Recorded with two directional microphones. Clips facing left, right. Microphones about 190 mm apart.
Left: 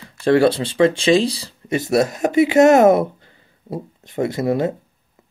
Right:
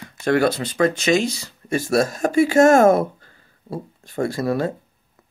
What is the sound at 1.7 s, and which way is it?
Speech, 20° left (ahead or behind).